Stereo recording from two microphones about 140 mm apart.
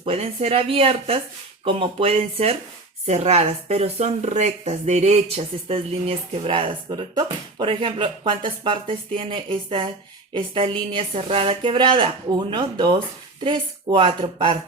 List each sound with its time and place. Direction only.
0.0 s speech: 45° right (ahead or behind)